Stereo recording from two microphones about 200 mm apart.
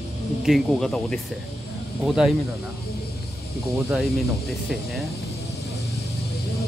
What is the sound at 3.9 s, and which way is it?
Speech, centre (ahead or behind).